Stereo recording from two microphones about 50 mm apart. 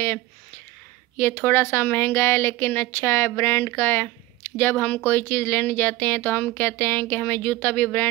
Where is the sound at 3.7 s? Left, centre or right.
Left.